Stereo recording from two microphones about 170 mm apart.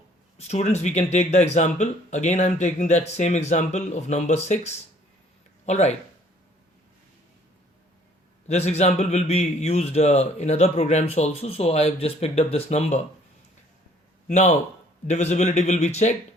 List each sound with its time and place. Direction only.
0.3 s a man's voice: 40° left (ahead or behind)
8.4 s a man's voice: 40° left (ahead or behind)
14.3 s a man's voice: 45° left (ahead or behind)